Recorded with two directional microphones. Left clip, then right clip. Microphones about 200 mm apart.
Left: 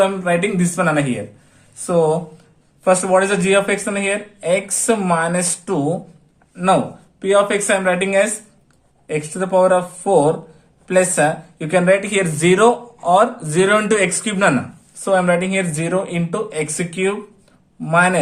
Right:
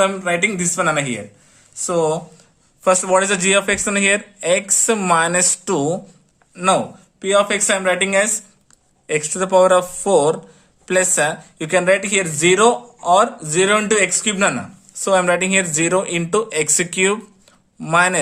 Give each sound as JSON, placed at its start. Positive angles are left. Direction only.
{"t": 0.0, "sound": "speech", "side_deg": -25}
{"t": 7.2, "sound": "speech", "side_deg": -25}
{"t": 15.0, "sound": "speech", "side_deg": -35}